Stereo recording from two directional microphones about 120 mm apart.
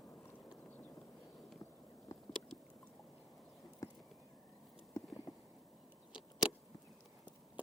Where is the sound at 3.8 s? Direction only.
25° left (ahead or behind).